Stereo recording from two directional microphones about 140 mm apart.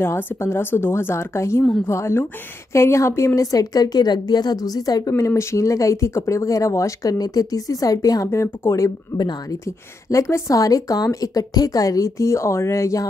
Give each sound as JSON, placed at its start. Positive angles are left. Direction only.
{"t": 0.0, "sound": "a woman's voice", "side_deg": 20}